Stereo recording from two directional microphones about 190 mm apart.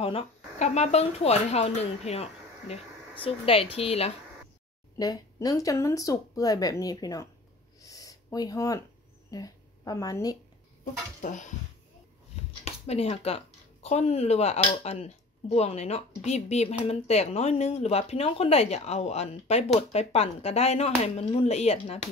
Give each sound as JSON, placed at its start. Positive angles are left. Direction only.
{"t": 0.0, "sound": "speech", "side_deg": 30}
{"t": 4.9, "sound": "speech", "side_deg": 20}
{"t": 7.8, "sound": "a sound", "side_deg": 20}
{"t": 9.3, "sound": "speech", "side_deg": 20}
{"t": 11.1, "sound": "speech", "side_deg": 40}
{"t": 12.6, "sound": "speech", "side_deg": 35}